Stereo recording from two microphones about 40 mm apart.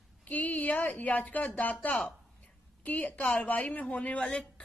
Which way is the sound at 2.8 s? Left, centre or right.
Left.